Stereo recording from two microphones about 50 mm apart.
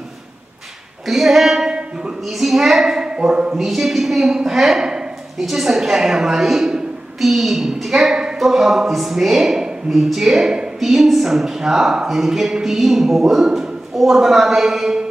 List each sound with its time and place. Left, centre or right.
1.0 s a sound: centre
2.2 s a woman's voice: centre
3.5 s a woman's voice: centre